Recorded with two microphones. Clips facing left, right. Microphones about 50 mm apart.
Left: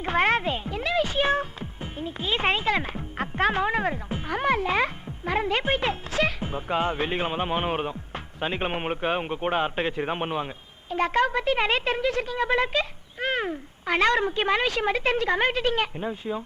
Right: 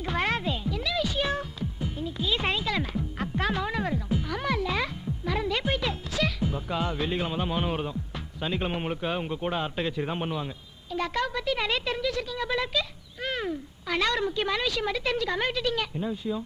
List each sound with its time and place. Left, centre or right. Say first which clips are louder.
0.0 s music: left 5 dB; left